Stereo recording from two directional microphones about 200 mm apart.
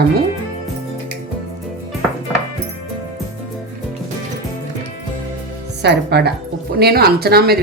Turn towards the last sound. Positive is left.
turn(degrees=-50)  # may be behind; listen again after turning